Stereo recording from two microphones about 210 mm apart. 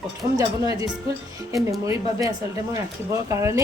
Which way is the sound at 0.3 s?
15° right (ahead or behind).